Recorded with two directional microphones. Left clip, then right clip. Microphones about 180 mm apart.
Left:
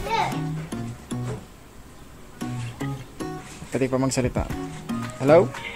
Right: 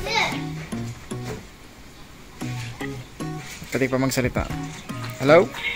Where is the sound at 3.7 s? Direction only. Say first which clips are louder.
Right 1 dB; centre (ahead or behind).